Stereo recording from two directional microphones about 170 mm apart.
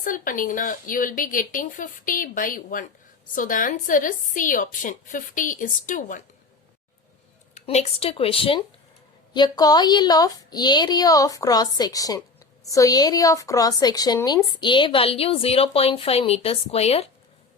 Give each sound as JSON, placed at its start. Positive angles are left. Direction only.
{"t": 0.0, "sound": "a woman's voice", "side_deg": 55}
{"t": 7.5, "sound": "a woman's voice", "side_deg": 40}